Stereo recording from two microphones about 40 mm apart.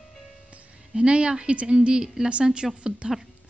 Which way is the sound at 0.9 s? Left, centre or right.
Right.